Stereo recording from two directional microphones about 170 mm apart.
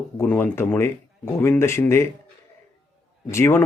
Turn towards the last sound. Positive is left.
turn(degrees=15)  # may be behind; listen again after turning